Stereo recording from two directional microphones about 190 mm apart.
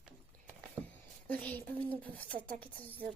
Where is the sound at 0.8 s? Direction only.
15° right (ahead or behind).